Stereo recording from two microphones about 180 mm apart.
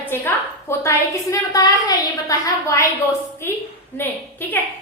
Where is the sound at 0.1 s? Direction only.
10° left (ahead or behind).